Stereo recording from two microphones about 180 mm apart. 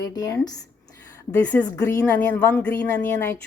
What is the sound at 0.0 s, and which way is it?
Speech, 20° left (ahead or behind).